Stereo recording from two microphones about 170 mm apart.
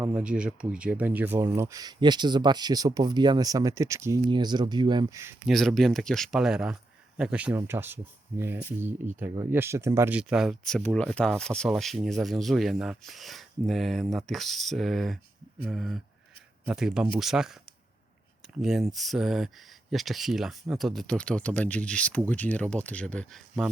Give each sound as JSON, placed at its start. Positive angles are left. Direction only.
{"t": 0.0, "sound": "speech", "side_deg": -10}
{"t": 5.5, "sound": "speech", "side_deg": 0}
{"t": 18.6, "sound": "speech", "side_deg": 0}